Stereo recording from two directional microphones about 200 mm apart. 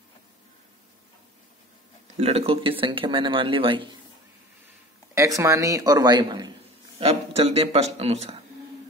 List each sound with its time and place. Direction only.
2.1 s speech: 30° right (ahead or behind)
5.1 s a man's voice: 15° right (ahead or behind); by 8.4 s 30° right (ahead or behind)